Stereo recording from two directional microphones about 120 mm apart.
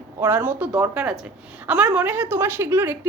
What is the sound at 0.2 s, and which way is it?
A woman's voice, 15° right (ahead or behind).